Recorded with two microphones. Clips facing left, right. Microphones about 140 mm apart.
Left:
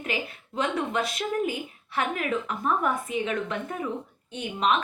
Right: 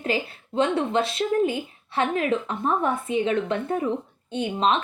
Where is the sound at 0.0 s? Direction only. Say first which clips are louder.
Right 5 dB; 30° right (ahead or behind).